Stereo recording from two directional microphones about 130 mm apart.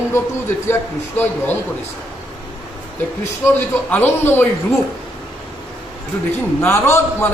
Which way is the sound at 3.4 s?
15° left (ahead or behind).